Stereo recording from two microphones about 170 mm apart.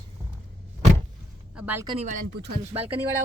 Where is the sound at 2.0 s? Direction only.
45° right (ahead or behind).